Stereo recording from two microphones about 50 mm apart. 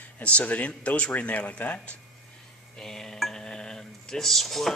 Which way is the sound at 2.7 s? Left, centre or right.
Centre.